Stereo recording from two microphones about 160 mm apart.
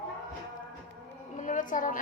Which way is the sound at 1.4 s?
55° left (ahead or behind).